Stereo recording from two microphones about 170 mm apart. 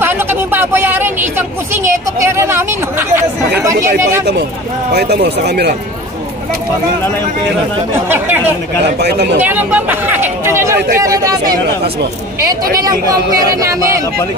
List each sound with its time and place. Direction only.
0.0 s a sound: 10° right (ahead or behind)
4.9 s speech: 70° right (ahead or behind)
7.9 s speech: 10° right (ahead or behind)
9.0 s speech: 75° right (ahead or behind)
9.4 s speech: 10° right (ahead or behind)
12.7 s speech: 20° right (ahead or behind)